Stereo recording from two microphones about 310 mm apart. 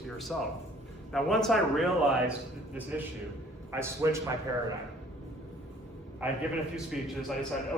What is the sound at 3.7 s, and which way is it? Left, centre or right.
Speech, centre.